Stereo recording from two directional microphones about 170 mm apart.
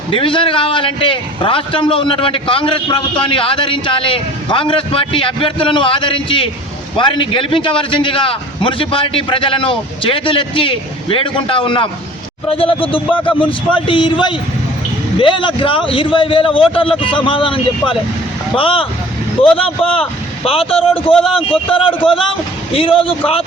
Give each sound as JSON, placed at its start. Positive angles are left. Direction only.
{"t": 0.1, "sound": "a man's voice", "side_deg": 30}